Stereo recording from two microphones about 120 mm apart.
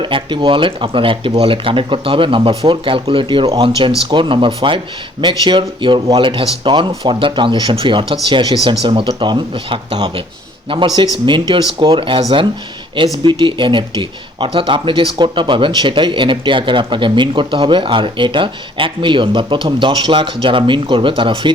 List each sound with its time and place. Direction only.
0.0 s speech: 45° right (ahead or behind)
11.3 s speech: 40° right (ahead or behind)
13.2 s speech: 45° right (ahead or behind)